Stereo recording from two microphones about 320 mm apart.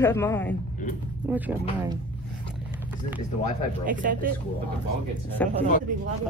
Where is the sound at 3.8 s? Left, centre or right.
Right.